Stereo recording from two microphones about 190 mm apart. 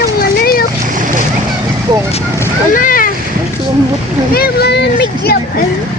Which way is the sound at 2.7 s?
45° left (ahead or behind).